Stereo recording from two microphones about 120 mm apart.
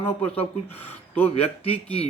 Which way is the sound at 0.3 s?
55° left (ahead or behind).